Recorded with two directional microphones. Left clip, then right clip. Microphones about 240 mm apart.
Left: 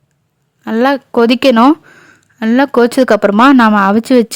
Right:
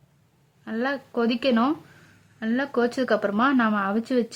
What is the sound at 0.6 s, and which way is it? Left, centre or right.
A woman's voice, left.